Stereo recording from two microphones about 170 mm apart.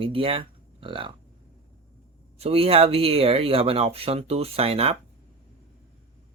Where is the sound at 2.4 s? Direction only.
35° right (ahead or behind).